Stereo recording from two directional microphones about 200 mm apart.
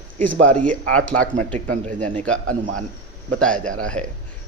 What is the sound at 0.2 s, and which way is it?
Speech, 40° right (ahead or behind).